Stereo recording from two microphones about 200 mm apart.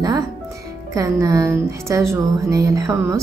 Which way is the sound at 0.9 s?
15° right (ahead or behind).